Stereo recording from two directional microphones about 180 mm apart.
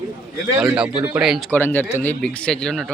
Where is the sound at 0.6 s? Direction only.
5° right (ahead or behind).